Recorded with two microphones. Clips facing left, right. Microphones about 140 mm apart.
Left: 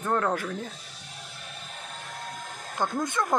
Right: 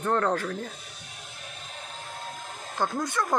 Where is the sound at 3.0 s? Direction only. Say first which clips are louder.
Left 1 dB; 20° left (ahead or behind).